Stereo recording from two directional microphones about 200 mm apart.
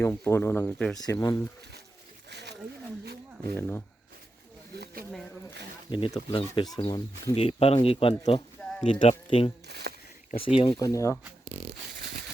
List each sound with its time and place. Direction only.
0.0 s speech: 10° left (ahead or behind)
0.9 s speech: 20° left (ahead or behind)
2.3 s wild animals: 60° right (ahead or behind)
3.5 s speech: 10° left (ahead or behind)
5.9 s speech: 25° left (ahead or behind)
8.6 s a sound: 10° left (ahead or behind)
9.0 s speech: 30° left (ahead or behind)
9.6 s speech: 55° right (ahead or behind)
10.6 s speech: 25° left (ahead or behind)
10.8 s speech: 15° left (ahead or behind)